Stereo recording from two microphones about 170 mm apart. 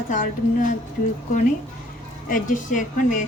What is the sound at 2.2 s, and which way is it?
Speech, 50° left (ahead or behind).